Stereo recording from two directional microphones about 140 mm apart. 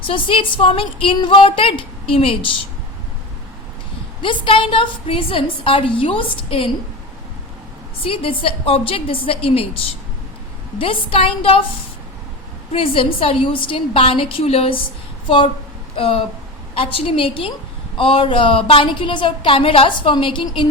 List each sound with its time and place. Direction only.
0.0 s a woman's voice: 40° left (ahead or behind)
4.2 s a woman's voice: 40° left (ahead or behind)
8.0 s a woman's voice: 40° left (ahead or behind)
10.8 s a woman's voice: 40° left (ahead or behind)
12.7 s a woman's voice: 40° left (ahead or behind)
16.0 s a woman's voice: 40° left (ahead or behind)